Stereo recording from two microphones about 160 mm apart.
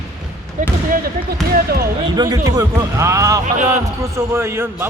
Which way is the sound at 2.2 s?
25° right (ahead or behind).